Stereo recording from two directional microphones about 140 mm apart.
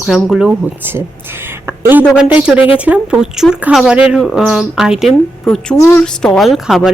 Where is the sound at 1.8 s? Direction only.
15° right (ahead or behind).